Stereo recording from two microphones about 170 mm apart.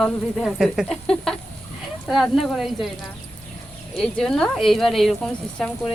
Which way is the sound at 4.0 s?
5° left (ahead or behind).